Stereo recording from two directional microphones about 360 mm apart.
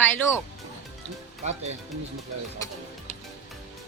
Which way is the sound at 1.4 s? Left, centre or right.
Centre.